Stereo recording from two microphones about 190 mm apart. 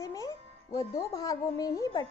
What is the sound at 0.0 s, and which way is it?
Speech, 15° left (ahead or behind).